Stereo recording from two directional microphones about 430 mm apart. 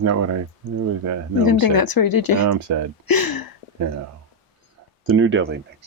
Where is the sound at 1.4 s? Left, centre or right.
Left.